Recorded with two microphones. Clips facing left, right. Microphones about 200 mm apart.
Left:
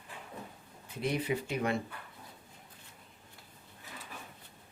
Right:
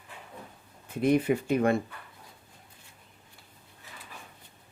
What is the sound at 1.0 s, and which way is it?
Speech, 50° right (ahead or behind).